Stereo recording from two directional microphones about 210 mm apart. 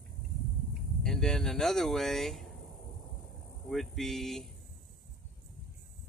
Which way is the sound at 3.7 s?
Centre (ahead or behind).